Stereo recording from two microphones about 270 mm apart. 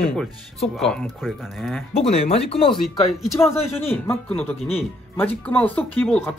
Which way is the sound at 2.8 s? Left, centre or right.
Centre.